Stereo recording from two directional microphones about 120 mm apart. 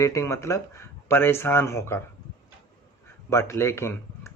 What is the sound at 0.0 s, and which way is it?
Speech, 25° left (ahead or behind).